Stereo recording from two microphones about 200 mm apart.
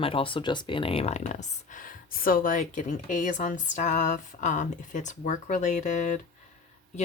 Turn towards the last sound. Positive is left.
turn(degrees=40)  # may be behind; listen again after turning